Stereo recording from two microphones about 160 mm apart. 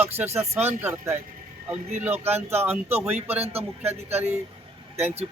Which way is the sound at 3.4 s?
40° right (ahead or behind).